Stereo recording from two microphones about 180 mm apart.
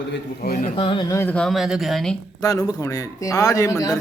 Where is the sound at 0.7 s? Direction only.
30° left (ahead or behind).